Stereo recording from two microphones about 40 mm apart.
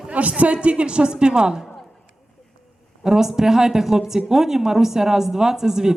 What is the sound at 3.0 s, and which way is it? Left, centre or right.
A woman's voice, centre.